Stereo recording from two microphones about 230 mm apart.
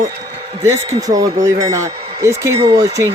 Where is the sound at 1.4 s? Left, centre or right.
Centre.